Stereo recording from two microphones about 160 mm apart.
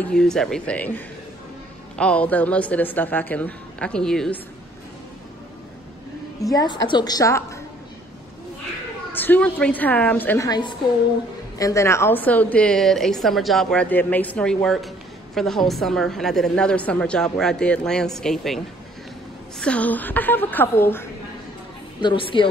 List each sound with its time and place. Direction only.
0.0 s a woman's voice: 5° left (ahead or behind)
6.4 s a woman's voice: 25° left (ahead or behind)
9.1 s a woman's voice: 10° left (ahead or behind)
19.6 s a woman's voice: 10° left (ahead or behind)
22.0 s speech: 30° left (ahead or behind)